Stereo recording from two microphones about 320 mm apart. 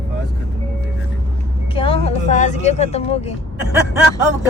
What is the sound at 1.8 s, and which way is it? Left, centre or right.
Speech, centre.